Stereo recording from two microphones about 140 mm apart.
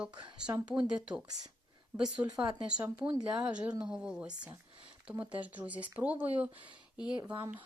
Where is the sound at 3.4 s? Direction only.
10° right (ahead or behind).